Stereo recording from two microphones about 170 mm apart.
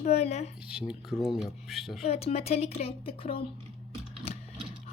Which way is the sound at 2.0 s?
35° left (ahead or behind).